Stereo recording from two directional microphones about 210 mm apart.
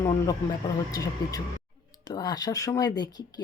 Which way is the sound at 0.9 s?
15° left (ahead or behind).